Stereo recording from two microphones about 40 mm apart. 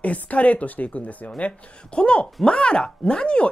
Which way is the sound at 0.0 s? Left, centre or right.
Left.